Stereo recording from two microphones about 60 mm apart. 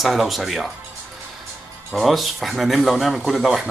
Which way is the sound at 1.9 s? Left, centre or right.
Centre.